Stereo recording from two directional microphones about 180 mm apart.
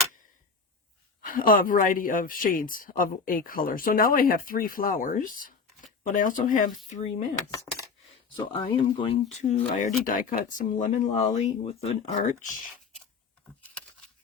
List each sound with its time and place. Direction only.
1.2 s speech: 50° left (ahead or behind)
7.5 s speech: 20° left (ahead or behind)
9.3 s speech: 40° left (ahead or behind)